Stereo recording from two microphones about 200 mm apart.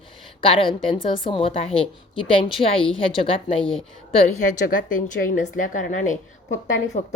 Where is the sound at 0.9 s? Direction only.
25° left (ahead or behind).